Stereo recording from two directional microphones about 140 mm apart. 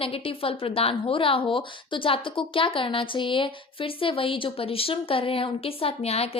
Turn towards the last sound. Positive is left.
turn(degrees=45)  # may be behind; listen again after turning